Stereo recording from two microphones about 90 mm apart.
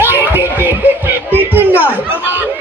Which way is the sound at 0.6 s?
20° right (ahead or behind).